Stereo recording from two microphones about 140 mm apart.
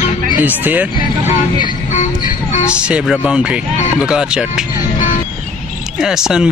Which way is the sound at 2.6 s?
5° right (ahead or behind).